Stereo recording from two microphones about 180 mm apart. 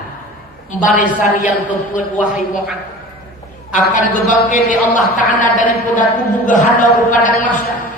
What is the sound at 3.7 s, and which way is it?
A man's voice, 45° left (ahead or behind).